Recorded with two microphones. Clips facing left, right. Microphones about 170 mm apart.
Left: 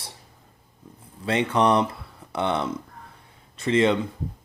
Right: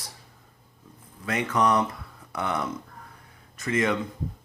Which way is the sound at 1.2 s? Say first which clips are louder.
Left 3 dB; 30° left (ahead or behind).